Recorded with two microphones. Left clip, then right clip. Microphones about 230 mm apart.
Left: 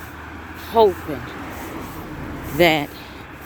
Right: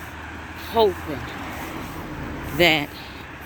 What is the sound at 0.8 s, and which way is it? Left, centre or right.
Speech, centre.